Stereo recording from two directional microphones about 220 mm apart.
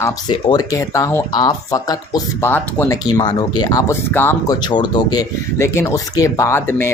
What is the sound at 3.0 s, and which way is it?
Speech, 20° left (ahead or behind).